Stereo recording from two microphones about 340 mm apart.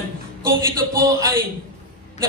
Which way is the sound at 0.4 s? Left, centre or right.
Centre.